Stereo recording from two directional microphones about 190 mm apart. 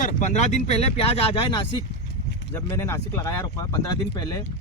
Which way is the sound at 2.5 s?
15° left (ahead or behind).